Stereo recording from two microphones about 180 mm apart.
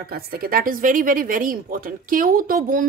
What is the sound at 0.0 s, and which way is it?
A woman's voice, 55° right (ahead or behind).